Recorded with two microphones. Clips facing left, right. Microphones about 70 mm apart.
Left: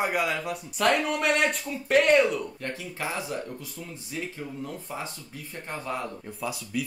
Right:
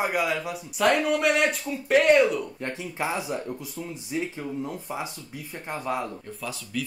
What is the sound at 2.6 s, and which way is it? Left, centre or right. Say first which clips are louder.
Speech: right 3 dB; right.